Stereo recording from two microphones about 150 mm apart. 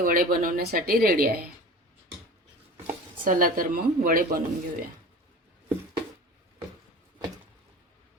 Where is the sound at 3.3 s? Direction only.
70° right (ahead or behind).